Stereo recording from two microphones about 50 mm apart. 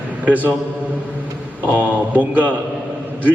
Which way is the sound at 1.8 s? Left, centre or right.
Right.